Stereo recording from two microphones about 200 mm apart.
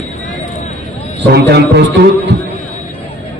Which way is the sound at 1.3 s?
55° right (ahead or behind).